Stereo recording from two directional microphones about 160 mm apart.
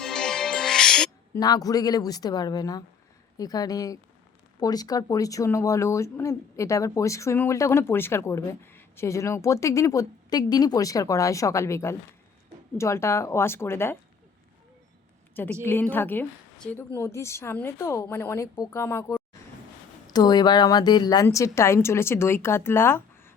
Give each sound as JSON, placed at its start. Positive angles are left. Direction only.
{"t": 0.0, "sound": "music", "side_deg": 5}
{"t": 1.3, "sound": "a woman's voice", "side_deg": 20}
{"t": 15.6, "sound": "a woman's voice", "side_deg": 15}